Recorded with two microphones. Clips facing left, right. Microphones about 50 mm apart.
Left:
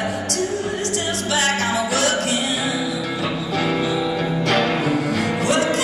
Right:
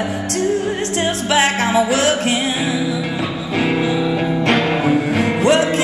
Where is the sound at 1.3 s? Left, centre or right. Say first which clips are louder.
Right 5 dB; right.